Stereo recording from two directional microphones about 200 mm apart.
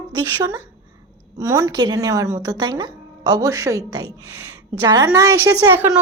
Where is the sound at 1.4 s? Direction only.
15° right (ahead or behind).